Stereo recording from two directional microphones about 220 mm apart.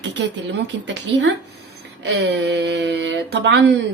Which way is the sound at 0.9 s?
55° right (ahead or behind).